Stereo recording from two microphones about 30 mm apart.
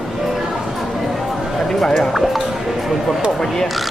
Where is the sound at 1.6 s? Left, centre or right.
Centre.